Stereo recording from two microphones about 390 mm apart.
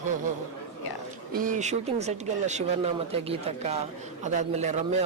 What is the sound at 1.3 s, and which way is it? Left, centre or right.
A man's voice, right.